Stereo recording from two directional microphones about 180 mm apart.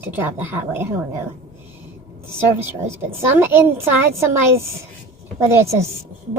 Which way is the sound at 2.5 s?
15° right (ahead or behind).